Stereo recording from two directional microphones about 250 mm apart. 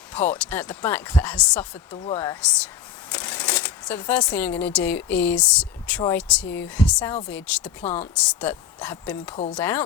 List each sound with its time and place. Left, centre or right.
0.1 s speech: centre
9.3 s speech: left
9.6 s speech: centre